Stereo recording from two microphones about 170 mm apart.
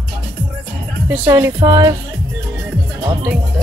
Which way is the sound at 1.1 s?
10° right (ahead or behind).